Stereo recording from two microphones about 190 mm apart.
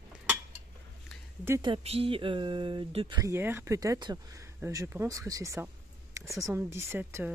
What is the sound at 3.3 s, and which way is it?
Speech, 10° right (ahead or behind).